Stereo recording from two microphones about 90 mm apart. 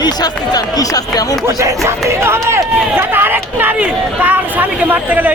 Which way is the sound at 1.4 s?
30° right (ahead or behind).